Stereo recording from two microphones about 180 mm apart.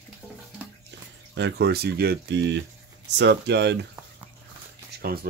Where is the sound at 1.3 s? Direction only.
70° right (ahead or behind).